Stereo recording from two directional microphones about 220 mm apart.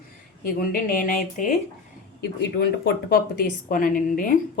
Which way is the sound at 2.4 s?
45° left (ahead or behind).